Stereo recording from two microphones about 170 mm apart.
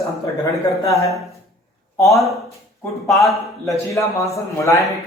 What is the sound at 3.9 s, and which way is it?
Speech, 20° left (ahead or behind).